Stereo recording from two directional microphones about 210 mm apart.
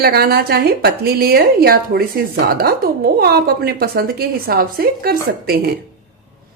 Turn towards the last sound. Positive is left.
turn(degrees=-45)  # may be behind; listen again after turning